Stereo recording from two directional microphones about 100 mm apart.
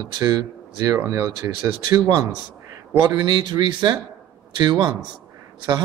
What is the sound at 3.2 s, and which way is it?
Speech, 50° right (ahead or behind).